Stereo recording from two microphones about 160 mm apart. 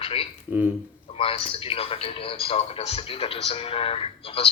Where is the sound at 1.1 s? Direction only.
35° left (ahead or behind).